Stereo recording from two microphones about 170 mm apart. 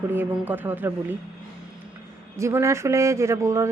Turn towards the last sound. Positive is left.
turn(degrees=-15)  # may be behind; listen again after turning